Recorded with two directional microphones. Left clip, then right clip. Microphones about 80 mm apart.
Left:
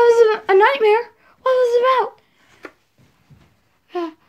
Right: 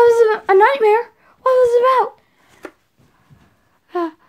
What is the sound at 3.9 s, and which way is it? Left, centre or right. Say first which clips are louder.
Gasp: right 4 dB; right.